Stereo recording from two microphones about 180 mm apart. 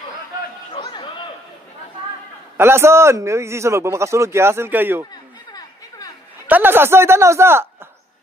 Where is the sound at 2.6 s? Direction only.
15° right (ahead or behind).